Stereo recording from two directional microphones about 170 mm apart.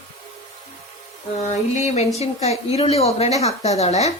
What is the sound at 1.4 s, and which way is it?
Speech, 40° left (ahead or behind).